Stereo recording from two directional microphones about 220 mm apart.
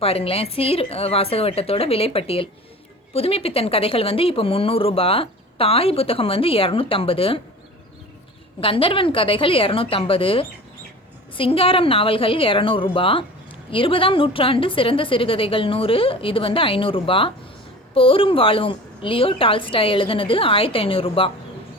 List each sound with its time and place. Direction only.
0.0 s speech: 25° left (ahead or behind)
8.6 s speech: 25° left (ahead or behind)